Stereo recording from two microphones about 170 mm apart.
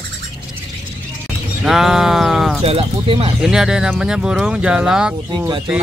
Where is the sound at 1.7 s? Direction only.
Centre (ahead or behind).